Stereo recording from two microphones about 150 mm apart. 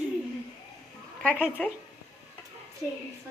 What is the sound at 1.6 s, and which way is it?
Speech, 10° left (ahead or behind).